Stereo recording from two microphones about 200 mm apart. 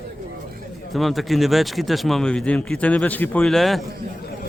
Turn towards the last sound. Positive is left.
turn(degrees=0)  # may be behind; listen again after turning